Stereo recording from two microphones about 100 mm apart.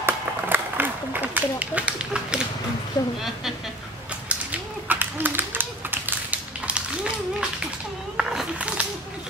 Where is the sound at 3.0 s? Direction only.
40° left (ahead or behind).